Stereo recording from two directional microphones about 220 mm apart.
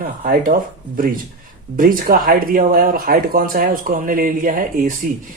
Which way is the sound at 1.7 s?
40° right (ahead or behind).